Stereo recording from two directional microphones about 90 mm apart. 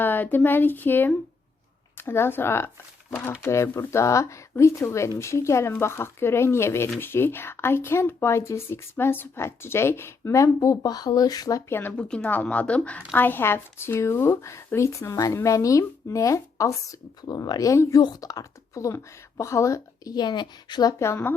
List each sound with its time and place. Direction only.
0.0 s speech: 20° left (ahead or behind); by 11.6 s 45° left (ahead or behind)
11.7 s speech: 25° left (ahead or behind)
11.9 s a woman's voice: 10° left (ahead or behind); by 18.0 s 35° left (ahead or behind)
18.0 s speech: 45° left (ahead or behind)
20.1 s a woman's voice: 55° left (ahead or behind)
21.0 s speech: 25° left (ahead or behind)